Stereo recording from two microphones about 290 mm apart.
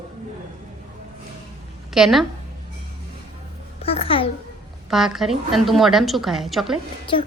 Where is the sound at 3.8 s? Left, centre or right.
Centre.